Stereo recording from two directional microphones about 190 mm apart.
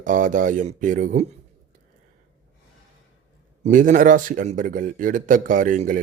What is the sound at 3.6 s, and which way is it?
Speech, 45° right (ahead or behind).